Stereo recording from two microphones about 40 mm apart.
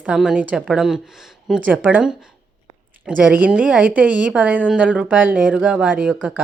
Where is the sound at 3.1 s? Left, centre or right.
Right.